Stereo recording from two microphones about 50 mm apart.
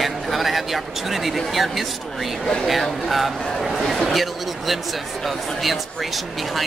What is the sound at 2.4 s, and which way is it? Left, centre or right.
Speech, centre.